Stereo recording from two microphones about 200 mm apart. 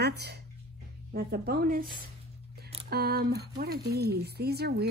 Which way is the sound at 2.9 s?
50° right (ahead or behind).